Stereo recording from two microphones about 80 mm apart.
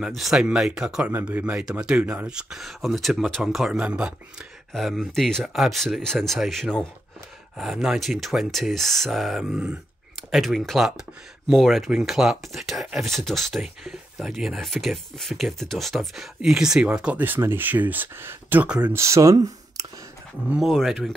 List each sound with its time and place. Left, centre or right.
0.0 s speech: centre
1.1 s speech: right
4.7 s speech: centre
7.5 s speech: centre
9.5 s speech: centre
10.3 s speech: centre
17.2 s speech: right
18.9 s speech: right
19.3 s clicking: right
20.6 s speech: centre